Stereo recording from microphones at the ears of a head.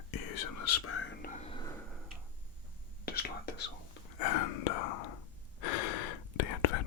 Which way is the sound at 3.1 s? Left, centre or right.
Left.